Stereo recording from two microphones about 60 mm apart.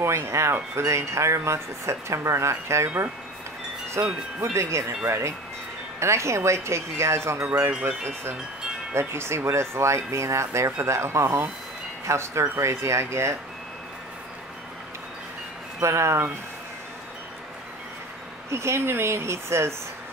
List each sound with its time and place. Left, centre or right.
0.0 s speech: right
4.0 s speech: right
8.9 s speech: right
15.8 s speech: right
18.5 s speech: right